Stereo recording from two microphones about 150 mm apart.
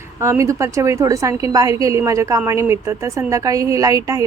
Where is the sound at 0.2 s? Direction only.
20° right (ahead or behind).